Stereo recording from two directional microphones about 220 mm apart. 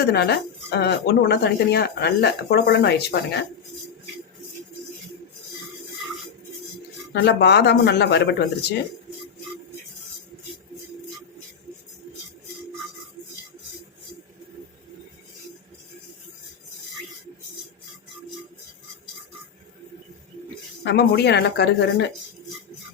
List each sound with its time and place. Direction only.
0.0 s speech: 45° left (ahead or behind)
7.1 s speech: 50° left (ahead or behind)
20.8 s speech: 50° left (ahead or behind)